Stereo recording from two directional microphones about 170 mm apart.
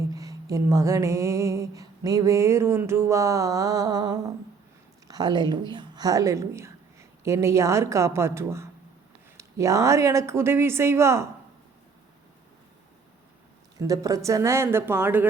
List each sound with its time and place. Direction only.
0.0 s a sound: 20° right (ahead or behind)
5.0 s speech: 25° right (ahead or behind)
13.7 s speech: 20° right (ahead or behind)